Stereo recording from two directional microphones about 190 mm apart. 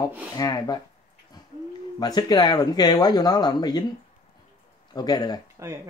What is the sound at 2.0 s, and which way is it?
Speech, 20° left (ahead or behind).